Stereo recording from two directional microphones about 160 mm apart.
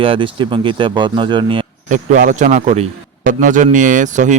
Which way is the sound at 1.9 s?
50° right (ahead or behind).